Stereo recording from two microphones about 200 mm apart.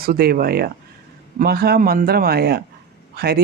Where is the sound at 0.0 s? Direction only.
50° right (ahead or behind).